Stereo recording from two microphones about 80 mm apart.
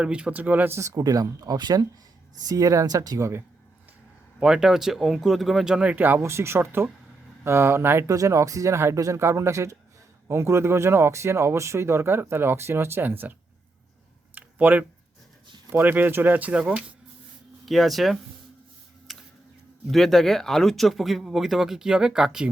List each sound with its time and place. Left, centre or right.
0.0 s speech: centre
0.7 s speech: right
3.2 s speech: right
4.4 s speech: centre; by 6.2 s right
6.2 s speech: right
8.1 s speech: right
14.3 s a sound: right
15.7 s speech: right
17.7 s speech: centre
19.1 s a sound: centre
19.9 s speech: centre